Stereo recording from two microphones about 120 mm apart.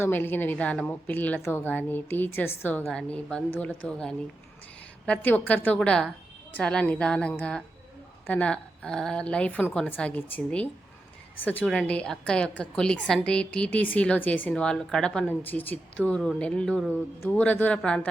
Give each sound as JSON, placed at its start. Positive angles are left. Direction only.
{"t": 0.0, "sound": "a woman's voice", "side_deg": 15}